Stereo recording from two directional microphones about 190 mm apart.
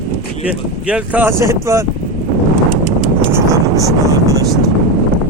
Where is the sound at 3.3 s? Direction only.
15° right (ahead or behind).